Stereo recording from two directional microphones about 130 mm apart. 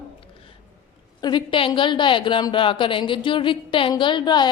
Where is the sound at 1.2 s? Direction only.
35° left (ahead or behind).